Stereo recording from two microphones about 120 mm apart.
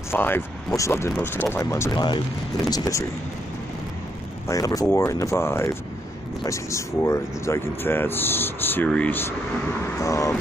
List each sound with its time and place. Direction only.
0.1 s speech: 20° left (ahead or behind)
1.9 s speech: 40° left (ahead or behind)
2.7 s speech: 30° left (ahead or behind)
4.5 s speech: 30° left (ahead or behind)
9.9 s speech: 25° left (ahead or behind)